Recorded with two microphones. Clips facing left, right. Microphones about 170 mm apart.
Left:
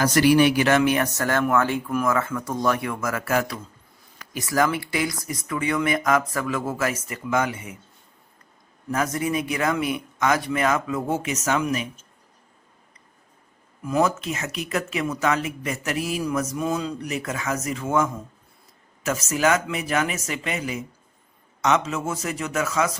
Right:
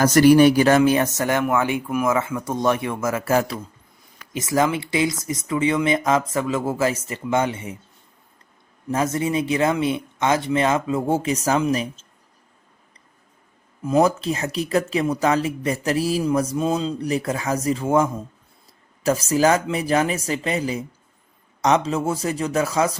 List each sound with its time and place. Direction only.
0.0 s speech: 45° right (ahead or behind)
0.8 s speech: 25° right (ahead or behind)
8.9 s speech: 25° right (ahead or behind)
13.8 s speech: 30° right (ahead or behind)